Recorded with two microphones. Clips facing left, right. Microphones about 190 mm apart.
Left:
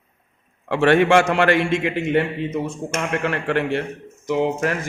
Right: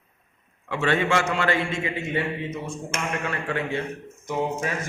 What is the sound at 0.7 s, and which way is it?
A man's voice, 70° left (ahead or behind).